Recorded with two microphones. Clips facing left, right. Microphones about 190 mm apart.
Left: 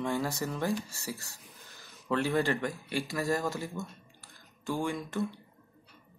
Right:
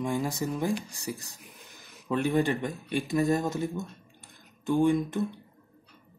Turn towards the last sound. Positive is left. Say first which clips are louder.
# right 6 dB
turn(degrees=-20)  # may be behind; listen again after turning